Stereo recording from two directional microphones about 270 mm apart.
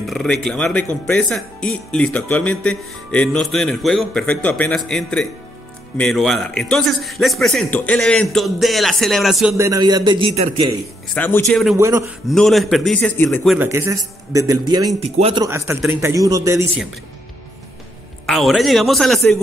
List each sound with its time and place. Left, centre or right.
0.0 s speech: centre
9.7 s a man's voice: centre
11.1 s speech: centre
11.7 s a man's voice: centre
12.3 s speech: centre
13.6 s a man's voice: centre
18.2 s speech: centre